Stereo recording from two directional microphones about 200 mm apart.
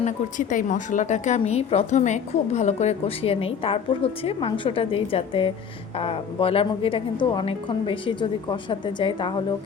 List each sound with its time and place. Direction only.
0.0 s a woman's voice: 40° left (ahead or behind); by 9.3 s 25° left (ahead or behind)